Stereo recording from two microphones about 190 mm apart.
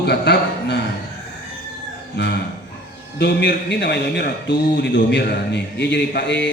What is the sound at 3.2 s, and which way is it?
Mantra, 60° left (ahead or behind).